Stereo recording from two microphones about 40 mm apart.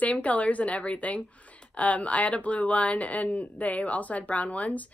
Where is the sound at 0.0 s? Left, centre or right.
Left.